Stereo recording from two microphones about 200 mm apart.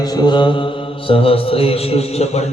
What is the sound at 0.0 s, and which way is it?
Mantra, 20° left (ahead or behind).